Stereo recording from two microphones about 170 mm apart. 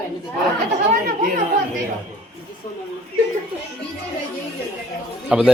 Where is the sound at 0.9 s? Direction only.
55° right (ahead or behind).